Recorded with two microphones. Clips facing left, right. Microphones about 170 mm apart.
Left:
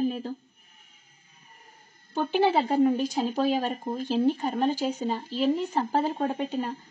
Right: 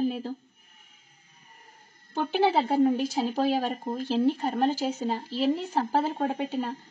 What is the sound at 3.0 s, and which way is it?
Speech, centre (ahead or behind).